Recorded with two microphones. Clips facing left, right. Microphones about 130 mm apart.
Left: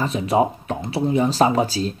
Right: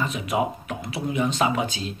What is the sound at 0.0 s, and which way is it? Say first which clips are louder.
Speech: left 6 dB; 30° left (ahead or behind).